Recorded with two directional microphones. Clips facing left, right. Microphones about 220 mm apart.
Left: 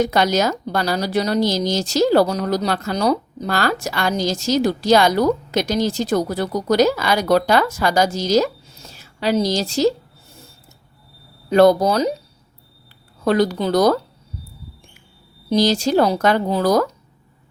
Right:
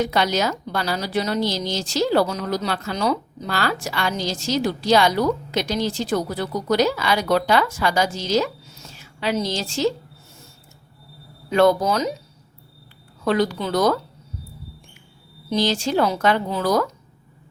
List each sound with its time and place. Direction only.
0.0 s a woman's voice: 45° left (ahead or behind)
11.4 s speech: 35° left (ahead or behind)
13.2 s speech: 40° left (ahead or behind)
15.4 s speech: 40° left (ahead or behind)